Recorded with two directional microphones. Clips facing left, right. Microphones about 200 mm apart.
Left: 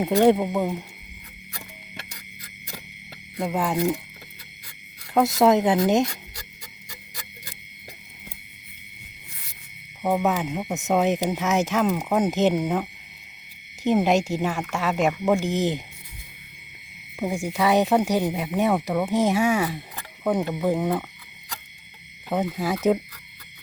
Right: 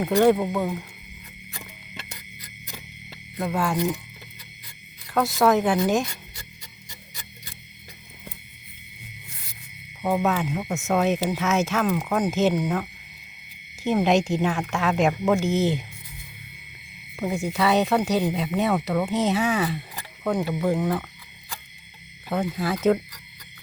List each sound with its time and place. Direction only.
0.0 s speech: 20° left (ahead or behind)
3.3 s speech: 15° left (ahead or behind)
5.1 s speech: 25° left (ahead or behind)
10.0 s speech: 15° left (ahead or behind)
17.2 s speech: 15° left (ahead or behind)
22.3 s speech: 15° left (ahead or behind)